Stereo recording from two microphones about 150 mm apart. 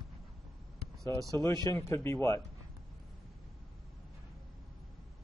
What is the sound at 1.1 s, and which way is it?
Speech, 20° right (ahead or behind).